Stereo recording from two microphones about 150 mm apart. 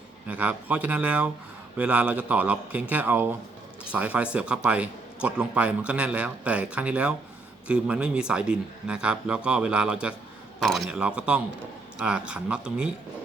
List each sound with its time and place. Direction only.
0.3 s speech: 10° right (ahead or behind)